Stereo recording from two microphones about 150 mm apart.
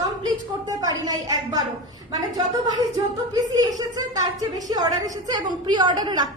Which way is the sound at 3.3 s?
25° right (ahead or behind).